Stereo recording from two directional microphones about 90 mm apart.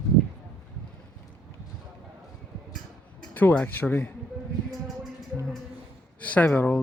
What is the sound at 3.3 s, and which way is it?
Speech, 20° left (ahead or behind).